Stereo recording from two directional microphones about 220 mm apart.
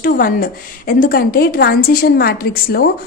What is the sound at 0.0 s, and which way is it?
A woman's voice, 40° left (ahead or behind).